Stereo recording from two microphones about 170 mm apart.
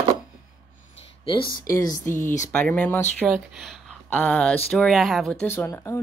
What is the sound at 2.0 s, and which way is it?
Speech, 50° left (ahead or behind).